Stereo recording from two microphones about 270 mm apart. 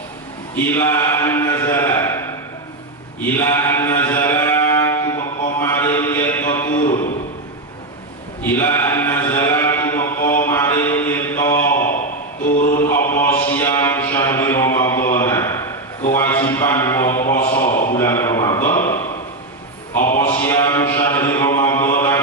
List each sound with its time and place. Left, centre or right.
0.5 s a man's voice: centre
3.3 s mantra: centre
8.5 s mantra: centre
12.5 s mantra: left
13.1 s mantra: centre
16.1 s a sound: centre
20.0 s a sound: left
20.2 s mantra: centre